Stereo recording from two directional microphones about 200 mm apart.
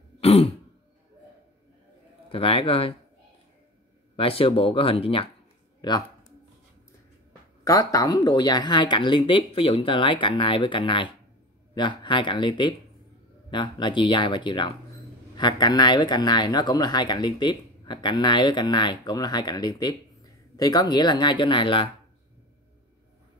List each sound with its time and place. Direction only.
0.2 s throat clearing: 30° left (ahead or behind)
2.2 s speech: 30° left (ahead or behind)
4.2 s speech: 25° left (ahead or behind)
7.6 s speech: 15° left (ahead or behind)